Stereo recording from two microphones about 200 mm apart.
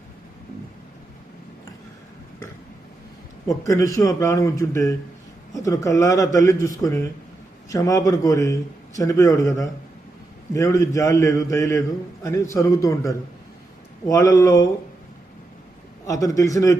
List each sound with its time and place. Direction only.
3.6 s a man's voice: 15° left (ahead or behind)
16.0 s a man's voice: 15° left (ahead or behind)